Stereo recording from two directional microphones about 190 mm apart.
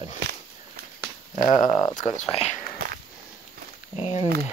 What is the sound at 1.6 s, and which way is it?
Speech, 25° left (ahead or behind).